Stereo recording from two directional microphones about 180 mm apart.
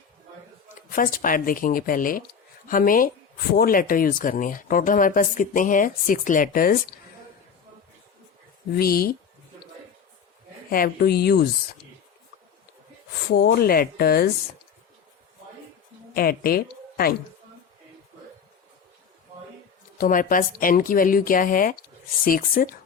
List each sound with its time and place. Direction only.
0.9 s speech: 50° left (ahead or behind)
8.7 s speech: 55° left (ahead or behind)
10.7 s speech: 55° left (ahead or behind)
13.3 s speech: 60° left (ahead or behind)
16.1 s speech: 55° left (ahead or behind)
20.0 s speech: 50° left (ahead or behind)